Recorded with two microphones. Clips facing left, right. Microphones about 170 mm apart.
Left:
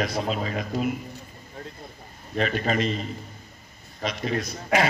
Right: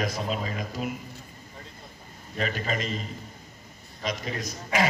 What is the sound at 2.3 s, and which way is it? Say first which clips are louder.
Speech: left 5 dB; 50° left (ahead or behind).